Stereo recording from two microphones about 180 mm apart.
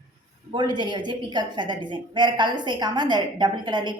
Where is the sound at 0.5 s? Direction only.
25° right (ahead or behind).